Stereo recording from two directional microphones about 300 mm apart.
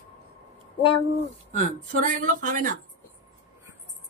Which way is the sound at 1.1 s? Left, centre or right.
Right.